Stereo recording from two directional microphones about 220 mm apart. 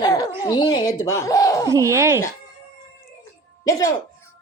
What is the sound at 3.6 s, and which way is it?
Speech, 15° left (ahead or behind).